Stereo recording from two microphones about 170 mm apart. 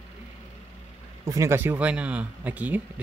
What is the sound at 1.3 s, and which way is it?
Speech, 15° right (ahead or behind).